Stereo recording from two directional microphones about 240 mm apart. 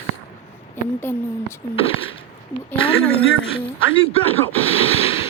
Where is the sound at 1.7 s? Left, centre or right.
Left.